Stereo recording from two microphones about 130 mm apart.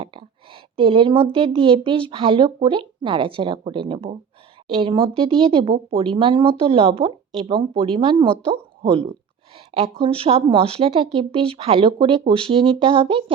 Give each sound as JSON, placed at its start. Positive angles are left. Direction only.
{"t": 0.0, "sound": "a woman's voice", "side_deg": -40}